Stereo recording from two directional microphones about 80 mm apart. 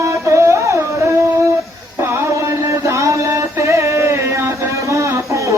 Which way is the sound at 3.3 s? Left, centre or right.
Right.